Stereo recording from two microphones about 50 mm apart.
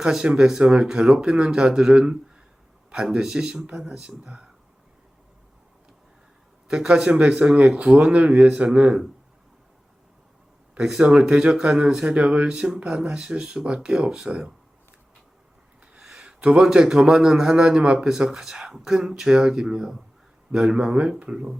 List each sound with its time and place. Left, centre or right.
0.0 s speech: centre
6.8 s speech: right
10.8 s speech: centre
16.0 s a sound: centre
16.4 s speech: right